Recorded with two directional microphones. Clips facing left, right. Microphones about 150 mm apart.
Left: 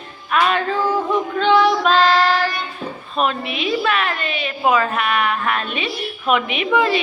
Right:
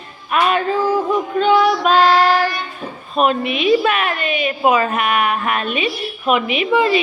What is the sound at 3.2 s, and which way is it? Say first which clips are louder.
A woman's voice: right 5 dB; 15° right (ahead or behind).